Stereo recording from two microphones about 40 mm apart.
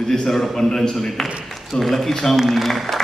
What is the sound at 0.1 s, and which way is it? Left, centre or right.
A man's voice, centre.